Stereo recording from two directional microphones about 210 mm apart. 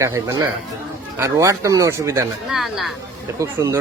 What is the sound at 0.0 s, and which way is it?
Speech, 15° right (ahead or behind).